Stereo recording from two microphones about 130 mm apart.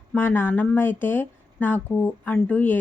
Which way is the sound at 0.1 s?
15° left (ahead or behind).